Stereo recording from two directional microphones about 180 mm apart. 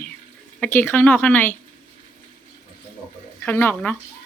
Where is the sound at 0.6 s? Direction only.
10° left (ahead or behind).